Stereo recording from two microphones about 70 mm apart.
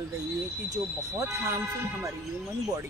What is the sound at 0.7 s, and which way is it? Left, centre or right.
Speech, right.